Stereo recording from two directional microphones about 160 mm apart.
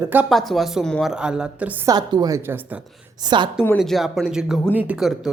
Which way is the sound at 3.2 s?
30° right (ahead or behind).